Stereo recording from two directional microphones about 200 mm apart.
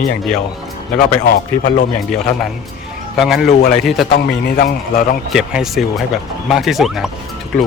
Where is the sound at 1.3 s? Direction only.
40° left (ahead or behind).